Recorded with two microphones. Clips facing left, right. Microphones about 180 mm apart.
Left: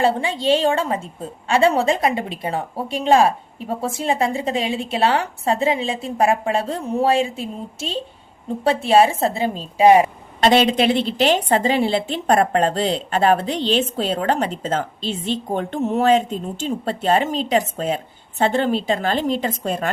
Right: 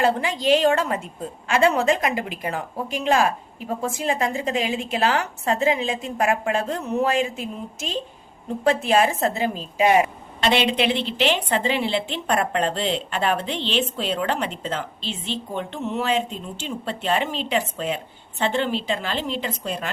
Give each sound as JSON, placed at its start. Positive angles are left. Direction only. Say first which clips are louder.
{"t": 0.0, "sound": "a woman's voice", "louder": "left 2 dB", "side_deg": 30}